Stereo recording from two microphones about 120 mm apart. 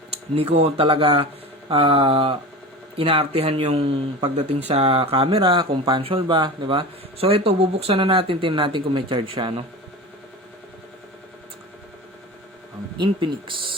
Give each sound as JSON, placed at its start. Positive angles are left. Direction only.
{"t": 0.1, "sound": "speech", "side_deg": -55}
{"t": 13.0, "sound": "speech", "side_deg": -45}